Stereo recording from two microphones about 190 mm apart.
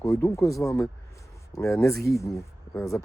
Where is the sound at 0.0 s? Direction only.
15° left (ahead or behind).